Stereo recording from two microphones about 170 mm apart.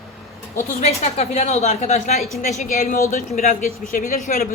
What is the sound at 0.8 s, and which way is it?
A woman's voice, 40° left (ahead or behind).